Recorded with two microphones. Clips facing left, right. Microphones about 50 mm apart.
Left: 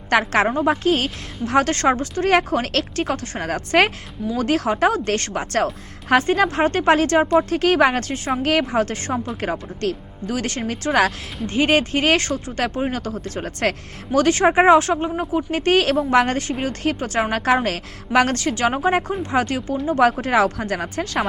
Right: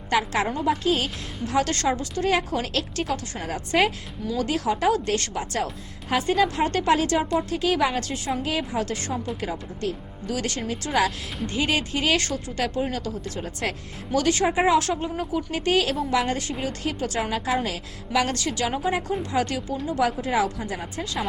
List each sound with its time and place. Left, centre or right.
0.1 s a woman's voice: left
0.5 s a woman's voice: left
8.4 s speech: left
8.8 s speech: left
9.8 s speech: left
10.2 s a woman's voice: left